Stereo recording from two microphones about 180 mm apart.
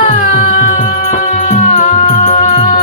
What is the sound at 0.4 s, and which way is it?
Music, 45° left (ahead or behind).